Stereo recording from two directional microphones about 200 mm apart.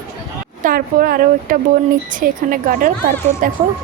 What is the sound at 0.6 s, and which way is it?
A woman's voice, 45° right (ahead or behind).